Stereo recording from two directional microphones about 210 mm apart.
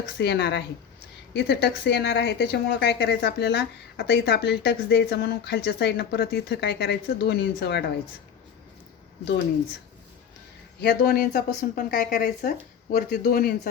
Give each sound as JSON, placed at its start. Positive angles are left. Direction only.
{"t": 0.2, "sound": "a woman's voice", "side_deg": 55}
{"t": 10.8, "sound": "a woman's voice", "side_deg": 45}